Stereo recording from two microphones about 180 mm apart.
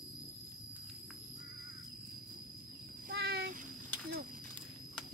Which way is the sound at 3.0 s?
65° right (ahead or behind).